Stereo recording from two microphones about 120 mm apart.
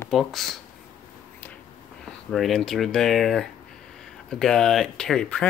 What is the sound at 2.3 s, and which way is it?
Speech, centre (ahead or behind).